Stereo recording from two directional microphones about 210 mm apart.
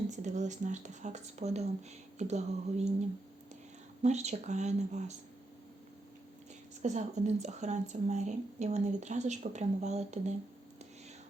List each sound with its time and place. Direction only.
0.1 s a woman's voice: 35° right (ahead or behind)
4.0 s a woman's voice: 30° right (ahead or behind)
6.8 s a woman's voice: 35° right (ahead or behind)